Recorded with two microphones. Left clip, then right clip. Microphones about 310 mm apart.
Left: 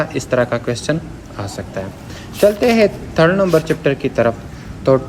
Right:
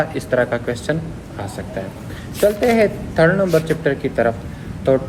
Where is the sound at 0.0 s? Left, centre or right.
Left.